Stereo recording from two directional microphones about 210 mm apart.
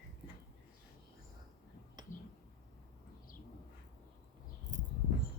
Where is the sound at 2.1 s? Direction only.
40° left (ahead or behind).